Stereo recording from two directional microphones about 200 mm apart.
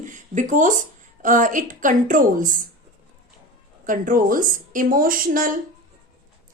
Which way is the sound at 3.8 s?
40° right (ahead or behind).